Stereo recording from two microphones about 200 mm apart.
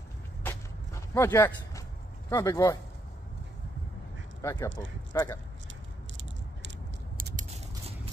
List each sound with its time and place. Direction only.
1.1 s speech: 10° left (ahead or behind)
4.4 s speech: 15° left (ahead or behind)
7.2 s biting: 45° right (ahead or behind)